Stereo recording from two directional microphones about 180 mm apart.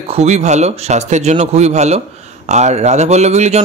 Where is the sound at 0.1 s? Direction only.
40° right (ahead or behind).